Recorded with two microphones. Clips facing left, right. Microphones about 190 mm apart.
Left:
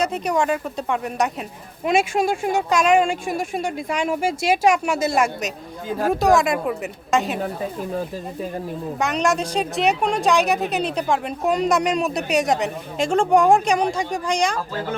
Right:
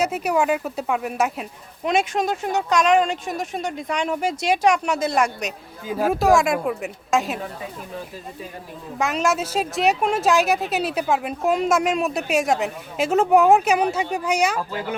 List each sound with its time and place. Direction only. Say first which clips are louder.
0.0 s a woman's voice: even; 5° right (ahead or behind)
7.6 s speech: left 7 dB; 45° left (ahead or behind)
9.0 s a woman's voice: even; centre (ahead or behind)